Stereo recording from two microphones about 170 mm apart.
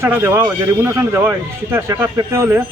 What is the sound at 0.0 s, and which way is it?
Speech, 15° right (ahead or behind).